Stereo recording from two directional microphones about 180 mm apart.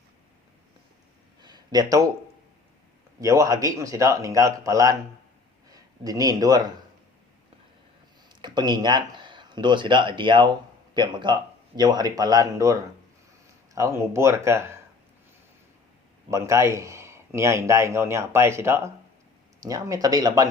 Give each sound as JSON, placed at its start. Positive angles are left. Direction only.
{"t": 1.4, "sound": "a sound", "side_deg": -25}
{"t": 3.2, "sound": "a man's voice", "side_deg": -20}
{"t": 8.3, "sound": "speech", "side_deg": -25}
{"t": 13.7, "sound": "a man's voice", "side_deg": -15}
{"t": 16.3, "sound": "a man's voice", "side_deg": -15}